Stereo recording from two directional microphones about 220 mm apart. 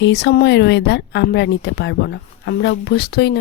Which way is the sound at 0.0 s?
50° left (ahead or behind).